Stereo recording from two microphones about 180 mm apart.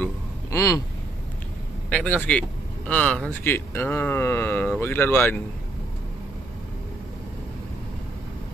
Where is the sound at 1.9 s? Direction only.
5° left (ahead or behind).